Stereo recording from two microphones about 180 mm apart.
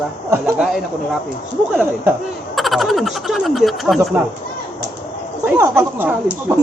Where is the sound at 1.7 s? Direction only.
10° right (ahead or behind).